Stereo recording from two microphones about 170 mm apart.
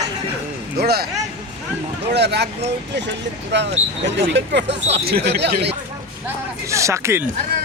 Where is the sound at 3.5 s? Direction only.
90° right.